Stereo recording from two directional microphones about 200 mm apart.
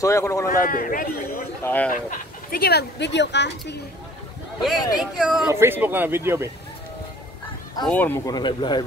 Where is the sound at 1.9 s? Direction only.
45° left (ahead or behind); by 3.7 s 60° left (ahead or behind).